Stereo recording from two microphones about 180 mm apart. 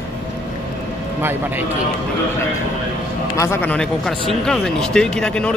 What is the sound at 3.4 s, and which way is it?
Speech, 10° left (ahead or behind).